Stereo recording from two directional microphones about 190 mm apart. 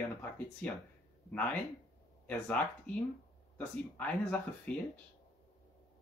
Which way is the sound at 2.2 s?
10° left (ahead or behind).